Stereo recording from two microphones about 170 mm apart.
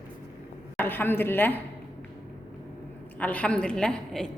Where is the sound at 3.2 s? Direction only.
10° left (ahead or behind).